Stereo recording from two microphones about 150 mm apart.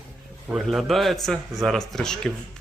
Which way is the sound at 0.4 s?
Centre (ahead or behind).